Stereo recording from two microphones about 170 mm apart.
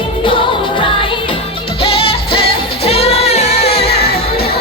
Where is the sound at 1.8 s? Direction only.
35° left (ahead or behind).